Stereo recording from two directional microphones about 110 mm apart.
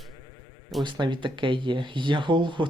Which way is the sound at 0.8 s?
45° right (ahead or behind).